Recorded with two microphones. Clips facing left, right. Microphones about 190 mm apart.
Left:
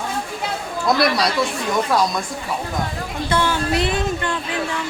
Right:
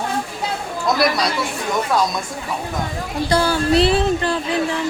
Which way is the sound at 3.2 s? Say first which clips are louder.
Right 3 dB; 35° right (ahead or behind).